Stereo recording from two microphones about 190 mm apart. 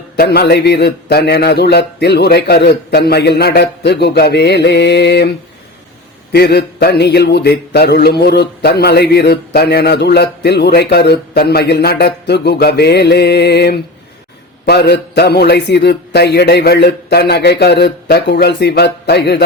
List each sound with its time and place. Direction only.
0.2 s mantra: 55° left (ahead or behind)
6.3 s mantra: 60° left (ahead or behind)